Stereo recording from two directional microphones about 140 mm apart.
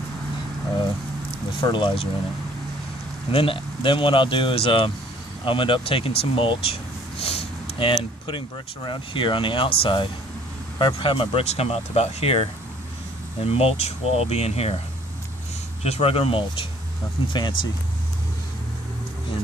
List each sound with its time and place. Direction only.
1.6 s speech: 35° left (ahead or behind)
3.3 s speech: 40° left (ahead or behind)
15.8 s speech: 45° left (ahead or behind)